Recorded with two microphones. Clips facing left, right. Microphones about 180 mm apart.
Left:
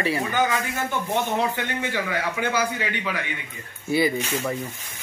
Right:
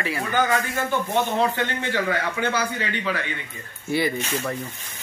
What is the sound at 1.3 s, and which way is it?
A man's voice, 10° left (ahead or behind).